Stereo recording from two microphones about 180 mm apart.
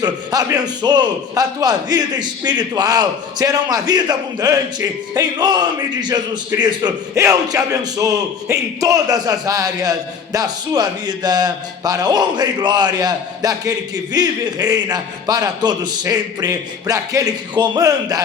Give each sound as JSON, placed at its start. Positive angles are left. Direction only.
{"t": 0.0, "sound": "a man's voice", "side_deg": -20}